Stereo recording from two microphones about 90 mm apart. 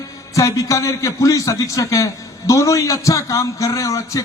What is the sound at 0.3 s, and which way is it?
A man's voice, 40° left (ahead or behind).